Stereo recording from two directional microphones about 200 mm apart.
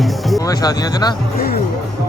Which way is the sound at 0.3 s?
20° left (ahead or behind).